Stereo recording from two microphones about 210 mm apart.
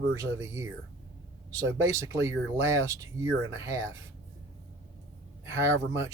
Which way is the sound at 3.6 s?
15° right (ahead or behind).